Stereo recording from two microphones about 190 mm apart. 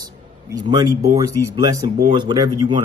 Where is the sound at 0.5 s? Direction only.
20° right (ahead or behind).